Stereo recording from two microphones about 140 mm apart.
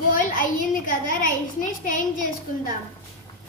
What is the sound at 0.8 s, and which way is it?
A woman's voice, 80° left.